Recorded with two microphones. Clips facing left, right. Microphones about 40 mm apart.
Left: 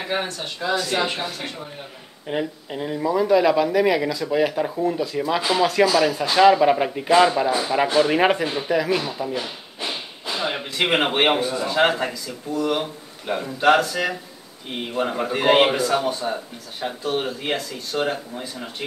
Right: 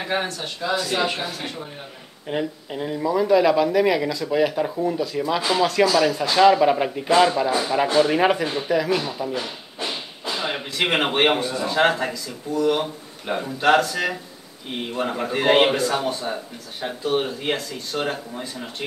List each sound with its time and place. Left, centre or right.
0.0 s speech: centre